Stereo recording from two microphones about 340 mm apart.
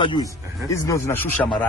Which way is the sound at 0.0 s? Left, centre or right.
Centre.